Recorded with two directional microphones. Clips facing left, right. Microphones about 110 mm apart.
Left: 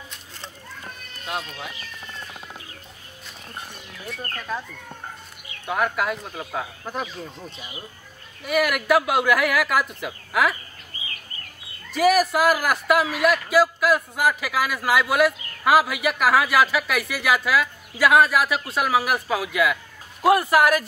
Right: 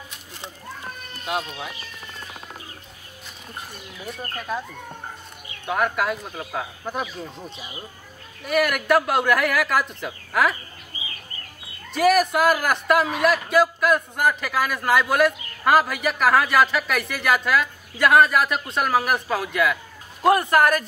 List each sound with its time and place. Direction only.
1.3 s speech: 5° right (ahead or behind)
4.0 s a man's voice: 5° right (ahead or behind)
5.7 s a man's voice: centre (ahead or behind)
8.5 s a man's voice: centre (ahead or behind)
10.9 s bird: 10° right (ahead or behind)
11.9 s a man's voice: 5° left (ahead or behind)